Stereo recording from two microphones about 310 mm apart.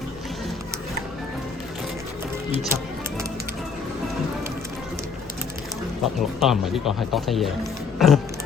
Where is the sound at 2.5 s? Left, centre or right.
Centre.